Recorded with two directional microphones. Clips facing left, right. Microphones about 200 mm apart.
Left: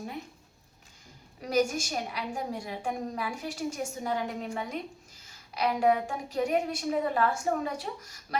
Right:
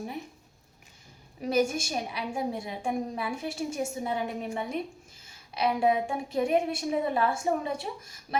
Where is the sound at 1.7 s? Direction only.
20° right (ahead or behind).